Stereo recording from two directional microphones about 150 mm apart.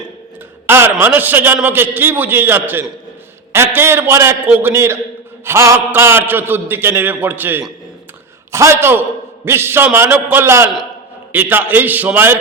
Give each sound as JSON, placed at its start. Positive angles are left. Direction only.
{"t": 0.7, "sound": "a man's voice", "side_deg": -15}